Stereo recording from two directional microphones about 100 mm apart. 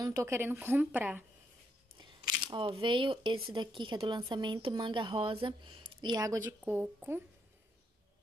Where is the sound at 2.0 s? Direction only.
40° right (ahead or behind).